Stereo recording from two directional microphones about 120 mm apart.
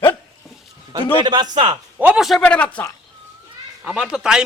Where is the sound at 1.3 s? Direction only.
35° right (ahead or behind).